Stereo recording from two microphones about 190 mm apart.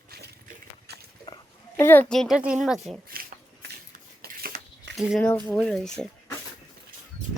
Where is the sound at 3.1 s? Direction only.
50° right (ahead or behind).